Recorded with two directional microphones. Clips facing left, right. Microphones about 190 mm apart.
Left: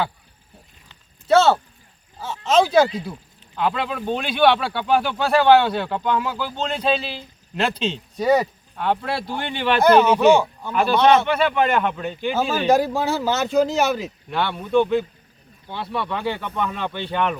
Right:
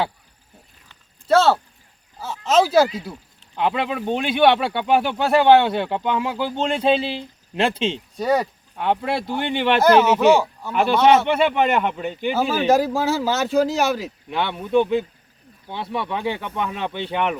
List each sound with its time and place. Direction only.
1.3 s speech: centre (ahead or behind)
3.5 s speech: 20° right (ahead or behind)
8.1 s speech: centre (ahead or behind)
8.7 s speech: 15° right (ahead or behind)
10.2 s speech: 5° right (ahead or behind)
11.3 s speech: 25° right (ahead or behind); by 14.1 s centre (ahead or behind)
14.3 s speech: 20° right (ahead or behind)